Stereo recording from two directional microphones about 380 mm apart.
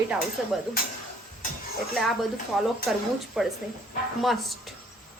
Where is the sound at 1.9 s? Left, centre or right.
Centre.